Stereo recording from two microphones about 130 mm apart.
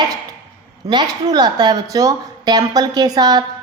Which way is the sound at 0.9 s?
35° right (ahead or behind).